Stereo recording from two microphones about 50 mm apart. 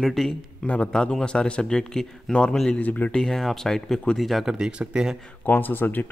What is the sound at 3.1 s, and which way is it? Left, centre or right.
A man's voice, centre.